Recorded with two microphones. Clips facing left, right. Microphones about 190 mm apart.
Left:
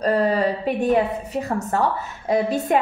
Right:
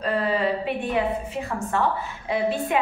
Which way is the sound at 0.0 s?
40° left (ahead or behind).